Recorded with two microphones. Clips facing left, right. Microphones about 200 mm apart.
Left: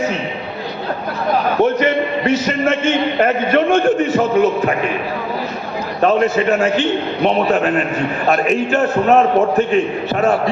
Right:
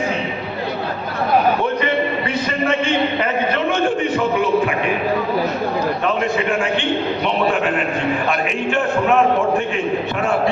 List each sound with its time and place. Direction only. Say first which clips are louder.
2.2 s a man's voice: left 4 dB; 45° left (ahead or behind)
6.0 s a man's voice: left 5 dB; 40° left (ahead or behind)
8.4 s a man's voice: left 4 dB; 40° left (ahead or behind)